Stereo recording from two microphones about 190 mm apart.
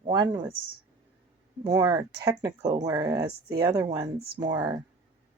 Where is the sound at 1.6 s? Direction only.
15° right (ahead or behind).